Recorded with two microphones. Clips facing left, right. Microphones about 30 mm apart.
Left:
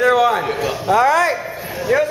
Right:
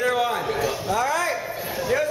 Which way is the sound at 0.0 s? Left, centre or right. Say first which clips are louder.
Left 8 dB; left.